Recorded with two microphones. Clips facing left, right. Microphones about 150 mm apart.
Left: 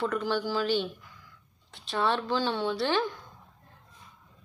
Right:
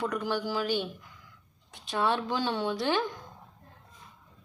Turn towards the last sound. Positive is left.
turn(degrees=-15)  # may be behind; listen again after turning